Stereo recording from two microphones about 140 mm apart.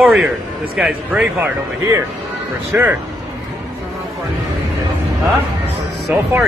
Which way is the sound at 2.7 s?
10° right (ahead or behind).